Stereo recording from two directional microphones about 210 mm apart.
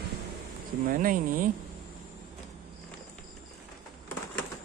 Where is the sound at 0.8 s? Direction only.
40° right (ahead or behind).